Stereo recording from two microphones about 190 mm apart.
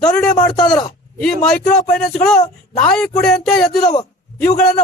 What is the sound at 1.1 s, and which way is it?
Speech, 5° left (ahead or behind).